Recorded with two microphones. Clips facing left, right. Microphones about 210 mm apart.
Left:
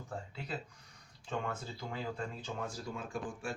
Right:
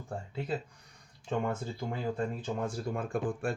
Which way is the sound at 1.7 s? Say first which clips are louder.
Right 6 dB; 50° right (ahead or behind).